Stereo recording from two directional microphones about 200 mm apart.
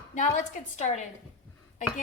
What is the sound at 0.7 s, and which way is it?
Speech, 35° left (ahead or behind).